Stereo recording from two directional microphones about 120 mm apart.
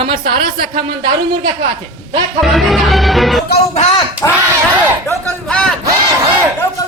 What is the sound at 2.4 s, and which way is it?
A man's voice, centre (ahead or behind).